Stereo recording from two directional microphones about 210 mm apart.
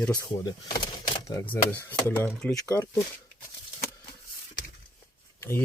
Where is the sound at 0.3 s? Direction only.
20° left (ahead or behind).